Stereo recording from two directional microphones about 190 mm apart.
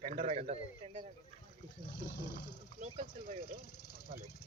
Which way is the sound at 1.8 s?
60° left (ahead or behind).